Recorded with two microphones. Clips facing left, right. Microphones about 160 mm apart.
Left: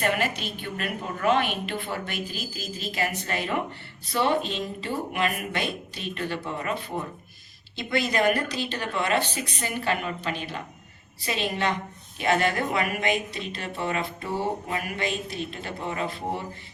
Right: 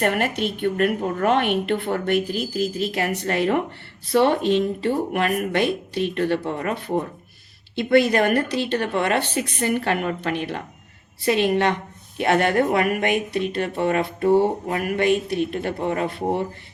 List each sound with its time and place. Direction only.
0.0 s speech: 60° right (ahead or behind)